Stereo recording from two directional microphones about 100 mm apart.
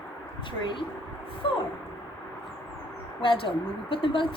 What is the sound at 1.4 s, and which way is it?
Speech, 60° left (ahead or behind).